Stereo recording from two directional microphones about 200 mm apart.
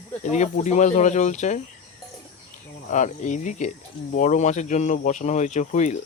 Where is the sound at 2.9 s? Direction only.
35° left (ahead or behind).